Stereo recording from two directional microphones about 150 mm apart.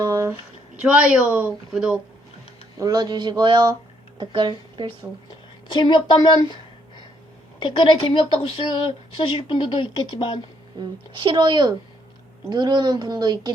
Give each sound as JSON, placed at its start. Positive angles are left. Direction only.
{"t": 0.0, "sound": "a sound", "side_deg": -20}
{"t": 0.8, "sound": "speech", "side_deg": -5}
{"t": 2.7, "sound": "a woman's voice", "side_deg": -25}
{"t": 5.6, "sound": "a woman's voice", "side_deg": 30}
{"t": 7.6, "sound": "a woman's voice", "side_deg": 35}
{"t": 10.8, "sound": "a woman's voice", "side_deg": -35}